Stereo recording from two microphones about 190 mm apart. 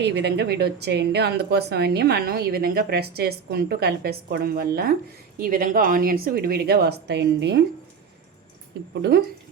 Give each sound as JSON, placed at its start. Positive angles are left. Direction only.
{"t": 0.0, "sound": "speech", "side_deg": -65}
{"t": 9.0, "sound": "speech", "side_deg": -60}